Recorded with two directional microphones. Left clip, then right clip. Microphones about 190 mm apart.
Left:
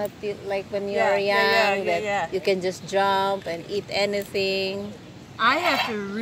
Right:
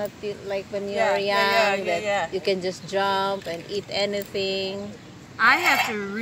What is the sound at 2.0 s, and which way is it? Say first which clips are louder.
Speech: right 1 dB; 40° right (ahead or behind).